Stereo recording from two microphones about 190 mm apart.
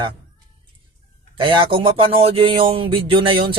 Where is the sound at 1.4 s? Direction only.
25° right (ahead or behind).